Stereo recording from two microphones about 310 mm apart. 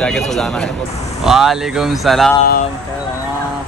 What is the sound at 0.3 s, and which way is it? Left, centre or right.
Speech, centre.